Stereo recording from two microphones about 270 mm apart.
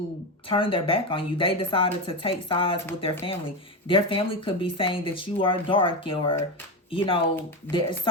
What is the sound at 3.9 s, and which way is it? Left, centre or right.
Speech, centre.